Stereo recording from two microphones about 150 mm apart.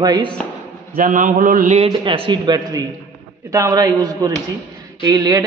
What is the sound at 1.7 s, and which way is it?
Speech, 40° right (ahead or behind).